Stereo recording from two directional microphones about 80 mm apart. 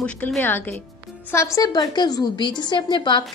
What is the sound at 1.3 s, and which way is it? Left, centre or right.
Speech, left.